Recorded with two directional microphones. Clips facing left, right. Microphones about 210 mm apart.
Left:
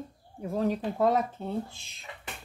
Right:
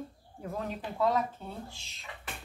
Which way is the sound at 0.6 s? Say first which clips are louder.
Left 6 dB; 45° left (ahead or behind).